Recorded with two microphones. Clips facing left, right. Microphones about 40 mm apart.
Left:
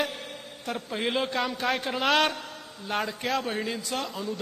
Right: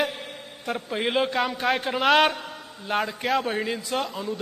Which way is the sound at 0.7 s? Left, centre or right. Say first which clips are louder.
Right 3 dB; centre.